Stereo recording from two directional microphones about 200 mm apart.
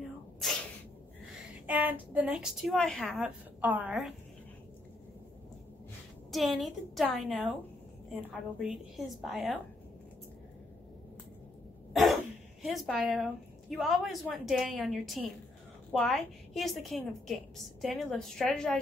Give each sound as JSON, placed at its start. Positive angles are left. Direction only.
{"t": 1.2, "sound": "a woman's voice", "side_deg": -10}
{"t": 6.3, "sound": "a woman's voice", "side_deg": 0}
{"t": 11.9, "sound": "throat clearing", "side_deg": 0}
{"t": 12.6, "sound": "a woman's voice", "side_deg": 0}